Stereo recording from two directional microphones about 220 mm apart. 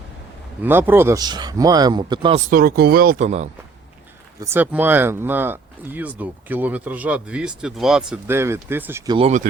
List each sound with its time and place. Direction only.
0.6 s speech: 10° right (ahead or behind)
2.5 s speech: 45° right (ahead or behind)
4.4 s speech: 10° right (ahead or behind)
9.1 s speech: 30° right (ahead or behind)